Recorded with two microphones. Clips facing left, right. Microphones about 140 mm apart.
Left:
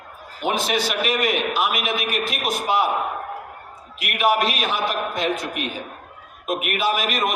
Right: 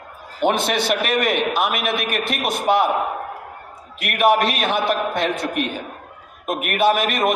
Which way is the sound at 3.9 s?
60° right (ahead or behind).